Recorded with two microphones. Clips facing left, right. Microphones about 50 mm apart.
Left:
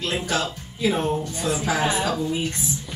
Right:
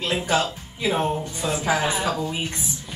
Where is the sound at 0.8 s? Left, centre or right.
Right.